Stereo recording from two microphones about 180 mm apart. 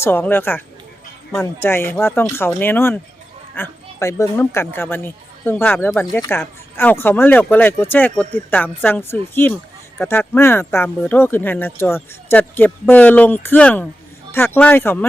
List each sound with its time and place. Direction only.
0.0 s speech: 10° left (ahead or behind)